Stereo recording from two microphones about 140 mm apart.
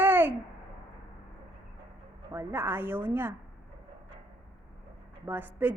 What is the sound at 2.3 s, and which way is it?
A woman's voice, 20° right (ahead or behind).